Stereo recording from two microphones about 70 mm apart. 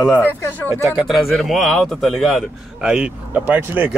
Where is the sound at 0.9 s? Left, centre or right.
Centre.